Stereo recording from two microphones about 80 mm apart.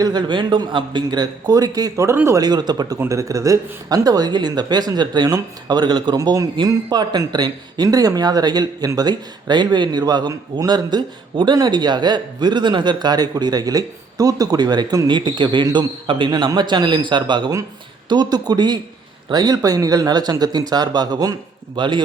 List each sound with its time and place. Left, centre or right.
0.0 s a man's voice: right
3.1 s a man's voice: right
6.1 s a man's voice: right
16.6 s speech: right
18.1 s a man's voice: right
21.8 s speech: right